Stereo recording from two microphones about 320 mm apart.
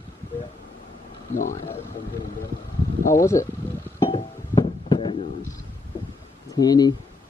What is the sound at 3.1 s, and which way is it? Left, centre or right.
Speech, centre.